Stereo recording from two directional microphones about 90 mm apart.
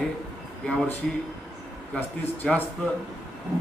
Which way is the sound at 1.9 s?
20° left (ahead or behind).